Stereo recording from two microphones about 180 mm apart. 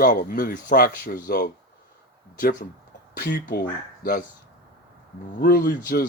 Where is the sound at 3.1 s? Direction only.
55° left (ahead or behind).